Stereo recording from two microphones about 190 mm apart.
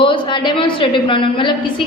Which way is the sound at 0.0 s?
25° left (ahead or behind).